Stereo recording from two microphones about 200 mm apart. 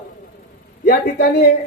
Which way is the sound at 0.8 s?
55° left (ahead or behind).